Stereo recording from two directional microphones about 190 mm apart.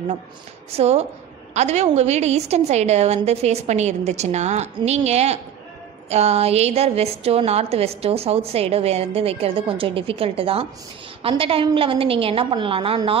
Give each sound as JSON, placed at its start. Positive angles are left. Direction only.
{"t": 0.7, "sound": "a woman's voice", "side_deg": -35}